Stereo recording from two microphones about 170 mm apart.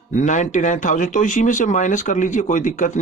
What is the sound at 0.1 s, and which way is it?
Speech, 45° left (ahead or behind).